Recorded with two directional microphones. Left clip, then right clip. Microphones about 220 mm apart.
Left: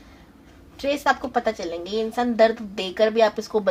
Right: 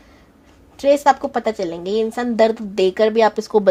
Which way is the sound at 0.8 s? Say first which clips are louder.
Right 8 dB; 50° right (ahead or behind).